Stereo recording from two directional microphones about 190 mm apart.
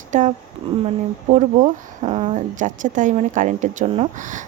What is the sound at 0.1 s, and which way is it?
Speech, 40° right (ahead or behind).